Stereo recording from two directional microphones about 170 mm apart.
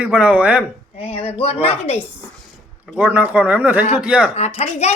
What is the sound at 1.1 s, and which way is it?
Speech, 35° left (ahead or behind).